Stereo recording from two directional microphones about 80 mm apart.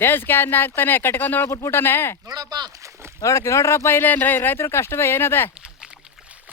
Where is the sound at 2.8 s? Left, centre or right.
Right.